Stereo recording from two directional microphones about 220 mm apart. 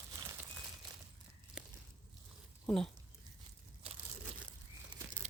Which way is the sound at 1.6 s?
5° right (ahead or behind).